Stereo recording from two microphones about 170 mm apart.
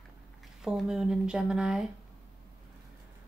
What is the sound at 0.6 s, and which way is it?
Speech, 5° right (ahead or behind).